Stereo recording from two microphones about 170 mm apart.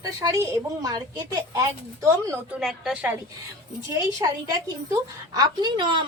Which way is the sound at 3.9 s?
20° right (ahead or behind).